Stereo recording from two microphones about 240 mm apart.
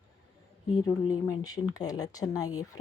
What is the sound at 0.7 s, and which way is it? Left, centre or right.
Speech, centre.